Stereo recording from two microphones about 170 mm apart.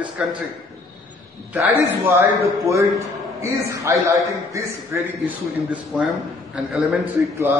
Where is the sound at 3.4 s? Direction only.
15° right (ahead or behind).